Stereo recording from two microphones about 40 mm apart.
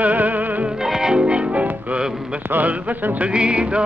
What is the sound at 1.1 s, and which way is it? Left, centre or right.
Music, right.